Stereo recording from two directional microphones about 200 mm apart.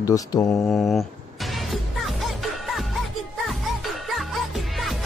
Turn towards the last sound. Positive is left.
turn(degrees=0)  # may be behind; listen again after turning